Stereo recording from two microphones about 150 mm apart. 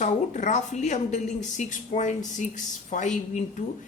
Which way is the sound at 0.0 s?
55° left (ahead or behind).